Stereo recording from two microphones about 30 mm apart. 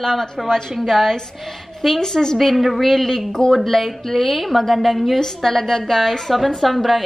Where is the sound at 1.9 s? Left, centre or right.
Centre.